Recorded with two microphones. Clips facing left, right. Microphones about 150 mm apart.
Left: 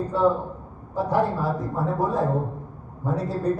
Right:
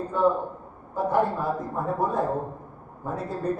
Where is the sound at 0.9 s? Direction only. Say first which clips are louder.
Left 1 dB; 50° right (ahead or behind).